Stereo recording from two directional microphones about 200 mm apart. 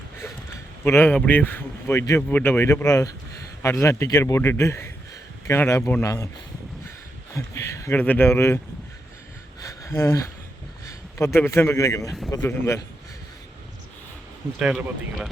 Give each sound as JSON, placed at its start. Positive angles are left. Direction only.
{"t": 0.9, "sound": "speech", "side_deg": 10}
{"t": 7.3, "sound": "speech", "side_deg": 15}
{"t": 9.6, "sound": "a sound", "side_deg": 15}
{"t": 10.8, "sound": "a man's voice", "side_deg": 15}
{"t": 14.6, "sound": "a man's voice", "side_deg": 0}